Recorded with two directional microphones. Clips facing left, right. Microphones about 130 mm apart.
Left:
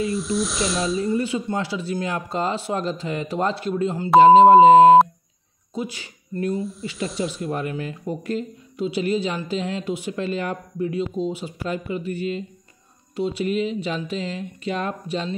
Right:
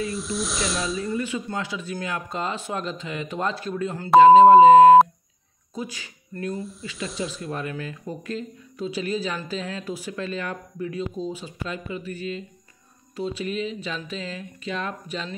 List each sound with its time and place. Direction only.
0.0 s speech: centre (ahead or behind)
1.1 s speech: 30° left (ahead or behind)
6.5 s speech: centre (ahead or behind)
6.8 s speech: 30° left (ahead or behind)
7.1 s speech: centre (ahead or behind)
7.5 s speech: 25° left (ahead or behind)